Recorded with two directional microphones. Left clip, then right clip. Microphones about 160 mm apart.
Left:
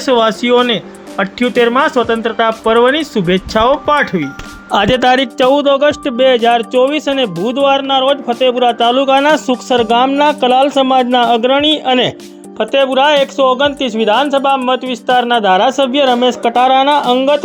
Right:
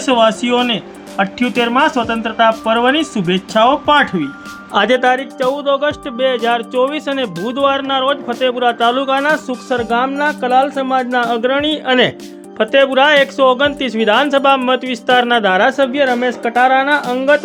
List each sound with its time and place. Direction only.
0.0 s a man's voice: 25° left (ahead or behind)
4.7 s speech: 50° left (ahead or behind)
5.6 s a man's voice: 35° left (ahead or behind); by 12.1 s 20° left (ahead or behind)
12.9 s speech: 5° left (ahead or behind)
15.8 s speech: 25° right (ahead or behind)
16.5 s a man's voice: 20° left (ahead or behind)